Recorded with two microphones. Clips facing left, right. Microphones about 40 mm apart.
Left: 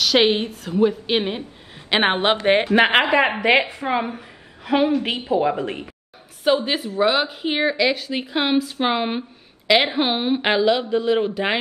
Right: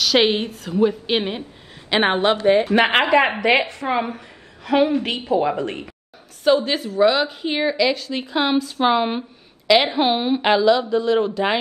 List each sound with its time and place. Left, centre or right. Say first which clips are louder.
0.0 s a woman's voice: even; centre
2.0 s a woman's voice: right 1 dB; left
2.7 s speech: left 1 dB; centre
3.3 s a woman's voice: even; left
4.6 s a woman's voice: right 1 dB; centre